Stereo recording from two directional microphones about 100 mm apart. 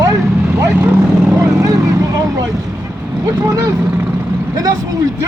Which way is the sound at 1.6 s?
35° right (ahead or behind).